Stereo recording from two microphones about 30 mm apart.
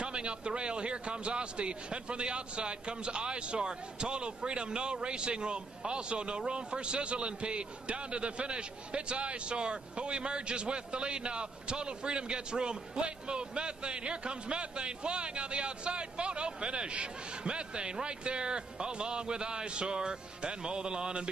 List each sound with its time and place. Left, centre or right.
0.0 s a man's voice: right